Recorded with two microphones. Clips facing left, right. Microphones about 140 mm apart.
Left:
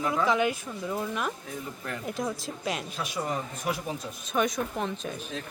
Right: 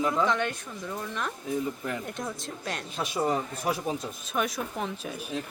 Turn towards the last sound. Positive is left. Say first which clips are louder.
# even
turn(degrees=-5)  # may be behind; listen again after turning